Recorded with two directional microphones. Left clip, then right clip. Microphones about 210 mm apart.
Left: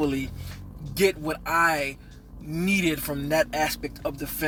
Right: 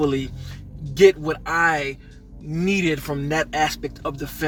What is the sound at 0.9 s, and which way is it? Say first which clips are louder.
Speech: right 8 dB; 15° left (ahead or behind).